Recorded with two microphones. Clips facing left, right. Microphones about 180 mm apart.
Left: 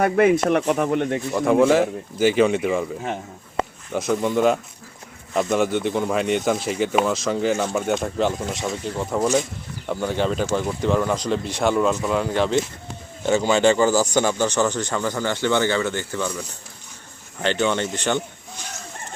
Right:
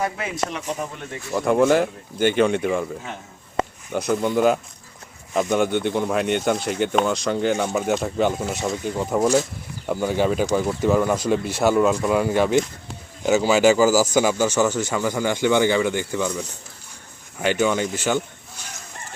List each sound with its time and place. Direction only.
0.0 s speech: 60° left (ahead or behind)
1.3 s speech: centre (ahead or behind)
3.9 s speech: centre (ahead or behind)